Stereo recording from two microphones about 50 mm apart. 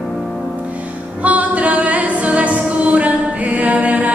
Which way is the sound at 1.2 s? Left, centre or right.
Right.